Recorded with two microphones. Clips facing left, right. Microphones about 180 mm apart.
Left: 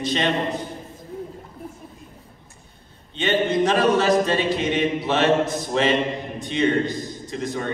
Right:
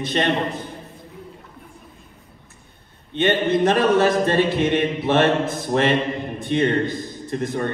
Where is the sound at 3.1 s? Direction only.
55° right (ahead or behind).